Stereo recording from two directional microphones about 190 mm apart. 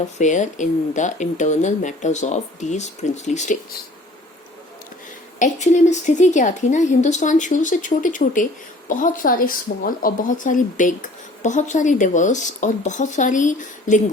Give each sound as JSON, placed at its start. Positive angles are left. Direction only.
{"t": 0.2, "sound": "speech", "side_deg": 40}
{"t": 5.4, "sound": "speech", "side_deg": 40}